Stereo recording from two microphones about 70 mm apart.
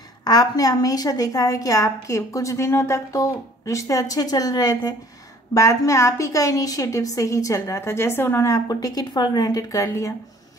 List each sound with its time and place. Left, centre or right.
0.2 s a woman's voice: left
5.5 s a woman's voice: left
8.6 s a woman's voice: left